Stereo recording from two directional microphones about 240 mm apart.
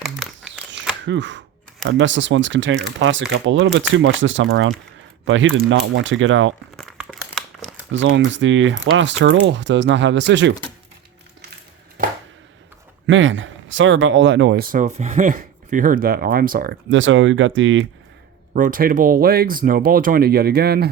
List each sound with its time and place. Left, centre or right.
0.0 s a sound: centre
1.0 s speech: right
6.7 s crumpling: centre
7.9 s speech: right
13.1 s speech: right
16.9 s speech: right
18.5 s speech: right